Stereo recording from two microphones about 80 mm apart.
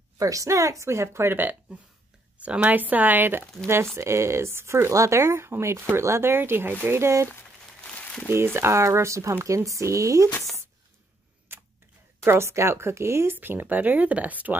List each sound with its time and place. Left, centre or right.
0.2 s speech: right
7.8 s crumpling: centre
8.5 s speech: right
11.5 s camera: right
12.3 s speech: right